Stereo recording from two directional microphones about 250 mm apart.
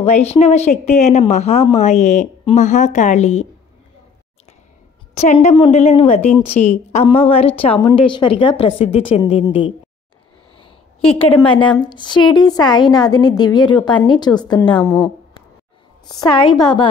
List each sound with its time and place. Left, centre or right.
0.0 s speech: left
5.1 s speech: left
11.1 s a woman's voice: centre
16.1 s a woman's voice: centre